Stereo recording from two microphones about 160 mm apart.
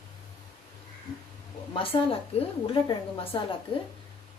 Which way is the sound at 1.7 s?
35° left (ahead or behind).